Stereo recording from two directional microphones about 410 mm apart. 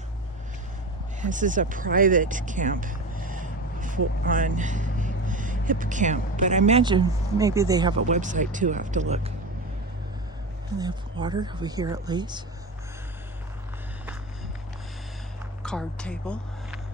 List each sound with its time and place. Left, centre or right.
1.2 s speech: centre
10.8 s speech: centre
15.6 s speech: centre